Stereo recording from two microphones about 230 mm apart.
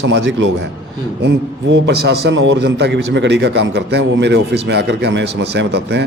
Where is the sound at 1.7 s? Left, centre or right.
Right.